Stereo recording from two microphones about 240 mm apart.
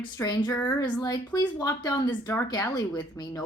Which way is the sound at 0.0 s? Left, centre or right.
Centre.